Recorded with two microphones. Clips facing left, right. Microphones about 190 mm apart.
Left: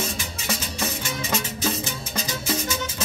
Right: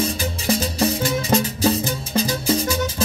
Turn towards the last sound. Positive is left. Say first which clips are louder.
# right 7 dB
turn(degrees=-35)  # may be behind; listen again after turning